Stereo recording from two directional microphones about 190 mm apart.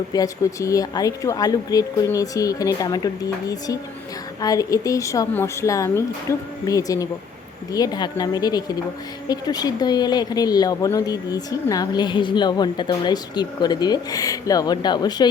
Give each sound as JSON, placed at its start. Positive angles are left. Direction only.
{"t": 0.1, "sound": "a woman's voice", "side_deg": 15}